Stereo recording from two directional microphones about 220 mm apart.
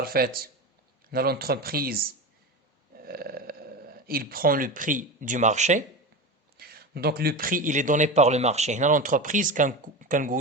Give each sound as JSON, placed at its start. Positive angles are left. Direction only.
{"t": 0.0, "sound": "speech", "side_deg": -45}
{"t": 6.6, "sound": "a man's voice", "side_deg": -45}